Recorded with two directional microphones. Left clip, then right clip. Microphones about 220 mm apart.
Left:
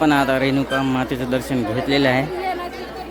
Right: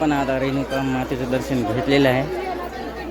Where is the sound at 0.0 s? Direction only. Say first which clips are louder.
Left 4 dB; 15° left (ahead or behind).